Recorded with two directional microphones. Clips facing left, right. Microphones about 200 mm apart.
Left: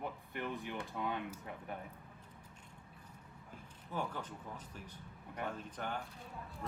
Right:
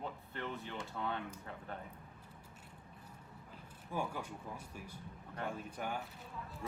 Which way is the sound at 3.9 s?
10° right (ahead or behind).